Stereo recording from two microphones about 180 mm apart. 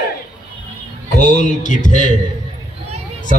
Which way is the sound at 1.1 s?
45° left (ahead or behind).